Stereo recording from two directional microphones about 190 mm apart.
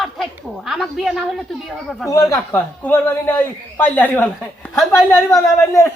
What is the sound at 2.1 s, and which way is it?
A man's voice, 15° left (ahead or behind).